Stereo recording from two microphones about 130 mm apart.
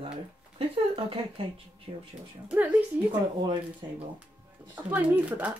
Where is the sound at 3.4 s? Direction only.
35° right (ahead or behind).